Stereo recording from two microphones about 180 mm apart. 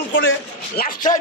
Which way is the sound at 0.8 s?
50° left (ahead or behind).